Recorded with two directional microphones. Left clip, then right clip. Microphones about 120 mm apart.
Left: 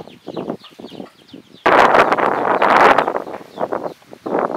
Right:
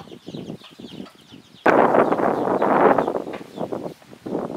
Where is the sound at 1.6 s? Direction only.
25° left (ahead or behind).